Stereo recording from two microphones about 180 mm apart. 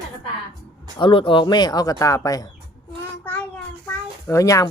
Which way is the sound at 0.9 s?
30° left (ahead or behind).